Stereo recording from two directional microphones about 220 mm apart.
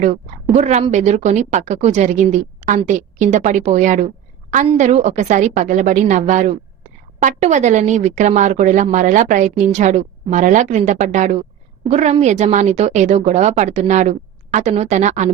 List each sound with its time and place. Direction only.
0.5 s speech: 30° right (ahead or behind)